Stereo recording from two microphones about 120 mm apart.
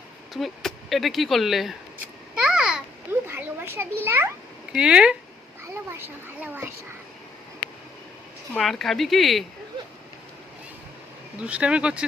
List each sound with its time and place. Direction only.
0.3 s speech: centre (ahead or behind)
2.4 s babbling: 5° right (ahead or behind)
3.1 s children playing: 20° right (ahead or behind)
4.7 s speech: 10° right (ahead or behind)
6.4 s speech: 15° right (ahead or behind)
8.5 s speech: centre (ahead or behind)
11.3 s speech: 10° right (ahead or behind)